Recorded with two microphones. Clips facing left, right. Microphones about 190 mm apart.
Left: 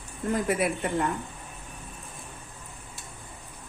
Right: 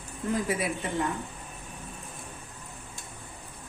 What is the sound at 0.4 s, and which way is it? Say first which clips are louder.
Speech: left 4 dB; 55° left (ahead or behind).